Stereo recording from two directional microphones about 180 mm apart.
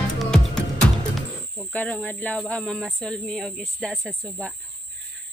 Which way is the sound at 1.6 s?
10° left (ahead or behind).